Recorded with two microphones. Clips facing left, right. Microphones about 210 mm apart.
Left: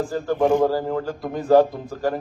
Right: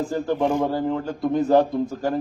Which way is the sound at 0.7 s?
25° right (ahead or behind).